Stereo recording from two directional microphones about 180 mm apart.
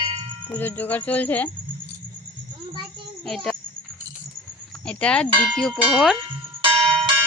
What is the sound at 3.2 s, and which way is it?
Speech, 5° left (ahead or behind).